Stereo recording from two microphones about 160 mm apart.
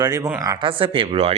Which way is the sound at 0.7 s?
35° right (ahead or behind).